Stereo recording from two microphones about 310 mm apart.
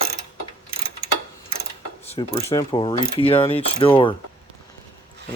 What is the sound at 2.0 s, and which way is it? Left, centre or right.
Mechanisms, centre.